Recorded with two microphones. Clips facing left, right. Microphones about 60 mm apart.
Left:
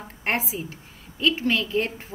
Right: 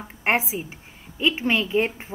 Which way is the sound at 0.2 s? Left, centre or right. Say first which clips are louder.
Right 4 dB; centre.